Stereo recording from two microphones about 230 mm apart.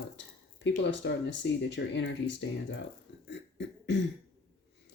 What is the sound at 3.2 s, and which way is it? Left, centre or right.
Cough, left.